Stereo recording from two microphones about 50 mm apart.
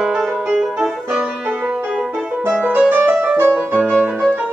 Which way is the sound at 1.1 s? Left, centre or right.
Right.